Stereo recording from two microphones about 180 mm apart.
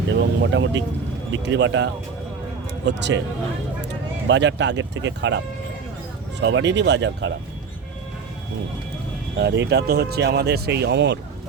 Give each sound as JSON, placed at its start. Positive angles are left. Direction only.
{"t": 0.1, "sound": "speech", "side_deg": -90}
{"t": 2.8, "sound": "speech", "side_deg": -75}
{"t": 4.3, "sound": "speech", "side_deg": -90}
{"t": 6.4, "sound": "speech", "side_deg": -85}
{"t": 9.4, "sound": "speech", "side_deg": -70}